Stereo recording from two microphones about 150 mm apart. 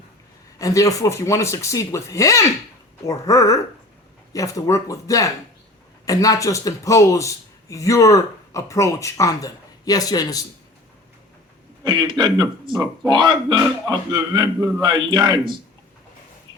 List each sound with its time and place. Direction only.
0.6 s a man's voice: 20° left (ahead or behind)
11.8 s a man's voice: 30° right (ahead or behind)